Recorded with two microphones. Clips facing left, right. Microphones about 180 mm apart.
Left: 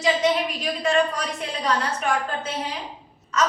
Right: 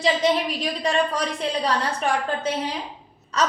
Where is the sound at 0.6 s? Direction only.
35° right (ahead or behind).